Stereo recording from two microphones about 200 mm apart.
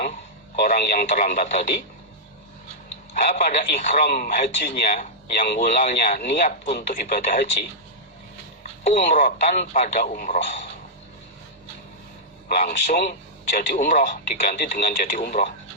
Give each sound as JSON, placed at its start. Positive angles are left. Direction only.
{"t": 0.0, "sound": "speech", "side_deg": 45}
{"t": 3.2, "sound": "a man's voice", "side_deg": 40}
{"t": 8.9, "sound": "a man's voice", "side_deg": 40}
{"t": 12.5, "sound": "speech", "side_deg": 45}